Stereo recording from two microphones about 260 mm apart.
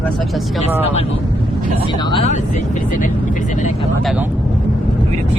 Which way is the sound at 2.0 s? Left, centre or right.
Left.